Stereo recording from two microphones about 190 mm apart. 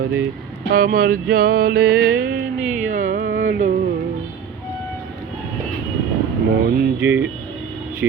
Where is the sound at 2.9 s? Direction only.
45° right (ahead or behind).